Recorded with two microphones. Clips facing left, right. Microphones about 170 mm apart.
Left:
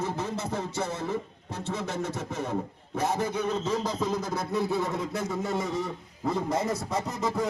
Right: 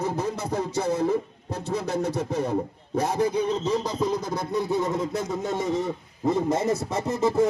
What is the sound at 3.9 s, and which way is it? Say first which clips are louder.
Speech: right 3 dB; 10° right (ahead or behind).